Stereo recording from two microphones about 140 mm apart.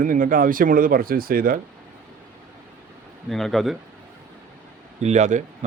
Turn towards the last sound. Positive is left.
turn(degrees=-60)  # may be behind; listen again after turning